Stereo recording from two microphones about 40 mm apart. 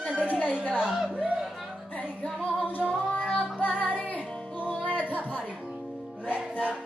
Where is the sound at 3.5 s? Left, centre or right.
Left.